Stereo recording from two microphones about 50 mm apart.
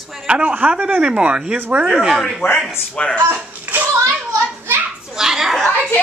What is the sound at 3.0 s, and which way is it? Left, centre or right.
Speech, centre.